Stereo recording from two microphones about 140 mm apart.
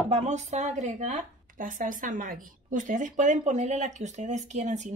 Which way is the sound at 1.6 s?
70° right (ahead or behind).